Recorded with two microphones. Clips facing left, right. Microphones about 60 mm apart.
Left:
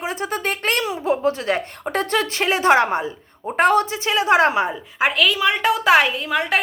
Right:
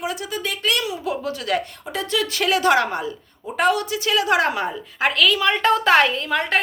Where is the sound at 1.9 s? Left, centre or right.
Left.